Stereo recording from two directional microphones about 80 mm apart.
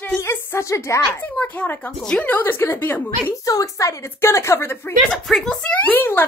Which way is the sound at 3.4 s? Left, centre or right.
Left.